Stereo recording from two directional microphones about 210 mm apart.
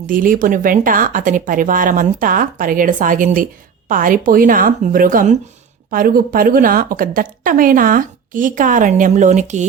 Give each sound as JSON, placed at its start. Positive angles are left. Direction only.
{"t": 0.1, "sound": "a woman's voice", "side_deg": -40}